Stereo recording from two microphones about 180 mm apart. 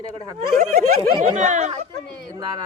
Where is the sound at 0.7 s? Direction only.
40° right (ahead or behind).